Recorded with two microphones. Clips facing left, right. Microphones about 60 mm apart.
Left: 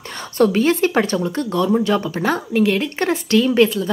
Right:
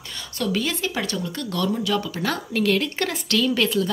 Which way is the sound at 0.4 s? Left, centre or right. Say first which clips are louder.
Left 10 dB; left.